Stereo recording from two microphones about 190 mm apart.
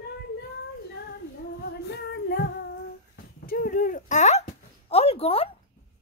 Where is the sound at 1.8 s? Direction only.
60° left (ahead or behind).